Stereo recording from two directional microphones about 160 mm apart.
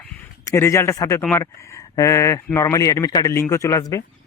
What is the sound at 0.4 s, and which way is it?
Speech, 15° left (ahead or behind).